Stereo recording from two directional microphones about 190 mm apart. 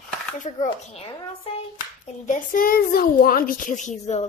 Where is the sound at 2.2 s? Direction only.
45° left (ahead or behind).